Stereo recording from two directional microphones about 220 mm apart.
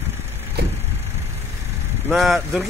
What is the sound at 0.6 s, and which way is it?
Vehicle, 50° right (ahead or behind).